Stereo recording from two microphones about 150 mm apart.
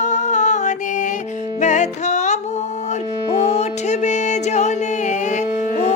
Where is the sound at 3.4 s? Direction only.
50° left (ahead or behind).